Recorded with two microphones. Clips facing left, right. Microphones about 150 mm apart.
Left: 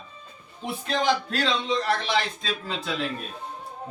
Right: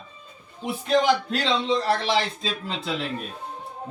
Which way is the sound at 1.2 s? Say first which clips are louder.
Right 2 dB; 25° right (ahead or behind).